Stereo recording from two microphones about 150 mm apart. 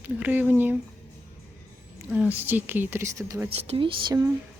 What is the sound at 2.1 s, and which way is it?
Speech, 10° right (ahead or behind).